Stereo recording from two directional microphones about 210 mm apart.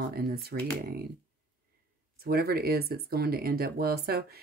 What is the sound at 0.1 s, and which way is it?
Speech, 50° right (ahead or behind).